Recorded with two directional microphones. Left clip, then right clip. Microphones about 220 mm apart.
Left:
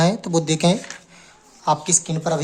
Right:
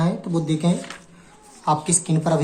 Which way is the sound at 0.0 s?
35° left (ahead or behind).